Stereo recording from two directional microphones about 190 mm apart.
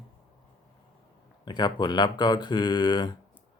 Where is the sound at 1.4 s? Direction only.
25° left (ahead or behind).